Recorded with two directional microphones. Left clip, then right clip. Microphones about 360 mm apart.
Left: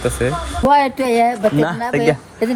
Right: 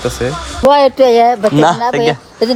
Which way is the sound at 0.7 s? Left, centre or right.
Centre.